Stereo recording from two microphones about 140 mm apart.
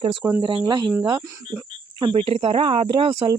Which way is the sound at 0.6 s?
30° right (ahead or behind).